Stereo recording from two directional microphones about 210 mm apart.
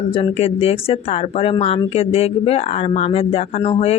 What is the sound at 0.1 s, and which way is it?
Speech, 25° left (ahead or behind).